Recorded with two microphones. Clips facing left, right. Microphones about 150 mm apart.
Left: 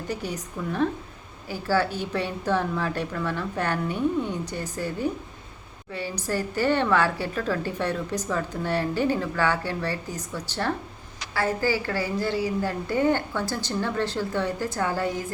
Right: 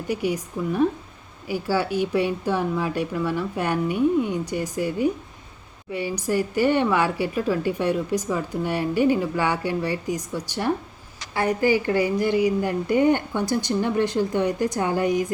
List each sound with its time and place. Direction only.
0.1 s a woman's voice: 10° right (ahead or behind)